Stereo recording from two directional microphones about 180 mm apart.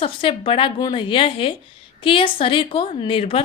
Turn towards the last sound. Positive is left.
turn(degrees=30)  # may be behind; listen again after turning